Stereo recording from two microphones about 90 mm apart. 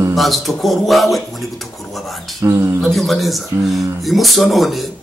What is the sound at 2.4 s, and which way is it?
Speech, 30° right (ahead or behind).